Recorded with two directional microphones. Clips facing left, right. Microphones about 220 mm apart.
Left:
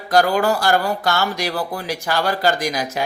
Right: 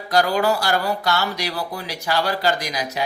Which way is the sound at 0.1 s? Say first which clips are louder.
Left 2 dB; 50° left (ahead or behind).